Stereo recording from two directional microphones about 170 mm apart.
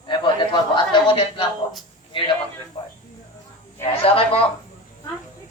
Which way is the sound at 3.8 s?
35° left (ahead or behind).